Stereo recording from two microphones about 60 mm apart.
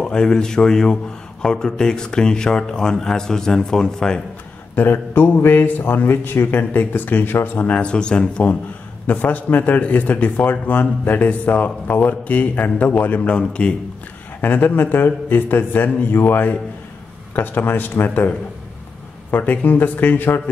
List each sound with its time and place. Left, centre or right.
0.0 s speech: centre
4.7 s a man's voice: left
7.6 s speech: centre
9.0 s speech: left
14.4 s a man's voice: left
19.3 s a man's voice: left